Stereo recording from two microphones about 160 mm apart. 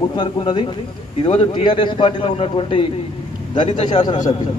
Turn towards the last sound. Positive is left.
turn(degrees=30)  # may be behind; listen again after turning